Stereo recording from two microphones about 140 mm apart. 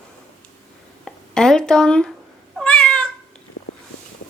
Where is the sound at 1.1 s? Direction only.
5° left (ahead or behind).